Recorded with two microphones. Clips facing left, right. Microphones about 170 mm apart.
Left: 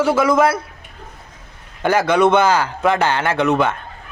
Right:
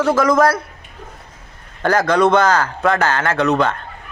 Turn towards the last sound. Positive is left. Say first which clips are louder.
# even
turn(degrees=10)  # may be behind; listen again after turning